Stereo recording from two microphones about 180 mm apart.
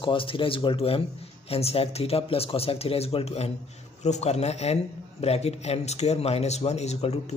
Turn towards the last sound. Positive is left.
turn(degrees=35)  # may be behind; listen again after turning